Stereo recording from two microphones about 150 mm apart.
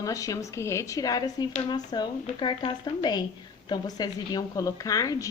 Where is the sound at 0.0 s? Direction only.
25° left (ahead or behind).